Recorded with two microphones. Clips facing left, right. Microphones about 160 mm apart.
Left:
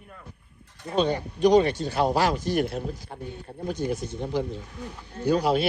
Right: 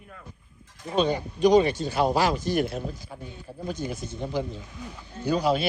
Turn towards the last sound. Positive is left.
turn(degrees=65)  # may be behind; listen again after turning